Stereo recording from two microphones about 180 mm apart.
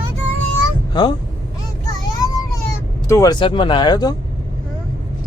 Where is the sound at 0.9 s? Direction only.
25° left (ahead or behind).